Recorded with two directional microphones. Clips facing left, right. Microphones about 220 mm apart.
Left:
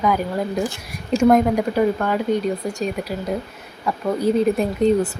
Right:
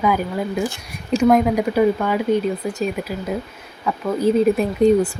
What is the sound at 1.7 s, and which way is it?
Speech, 10° right (ahead or behind).